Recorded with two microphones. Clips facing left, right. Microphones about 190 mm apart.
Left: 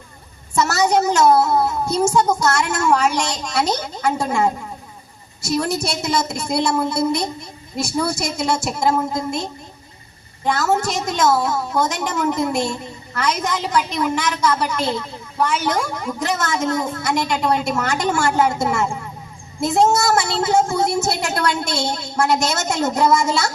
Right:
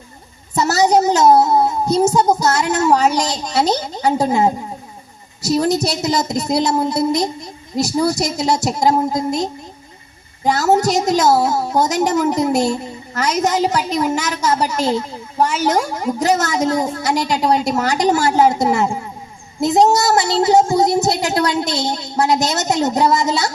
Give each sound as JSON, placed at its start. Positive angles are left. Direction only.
{"t": 0.5, "sound": "a sound", "side_deg": -35}
{"t": 1.6, "sound": "child singing", "side_deg": -35}
{"t": 2.1, "sound": "a woman's voice", "side_deg": -35}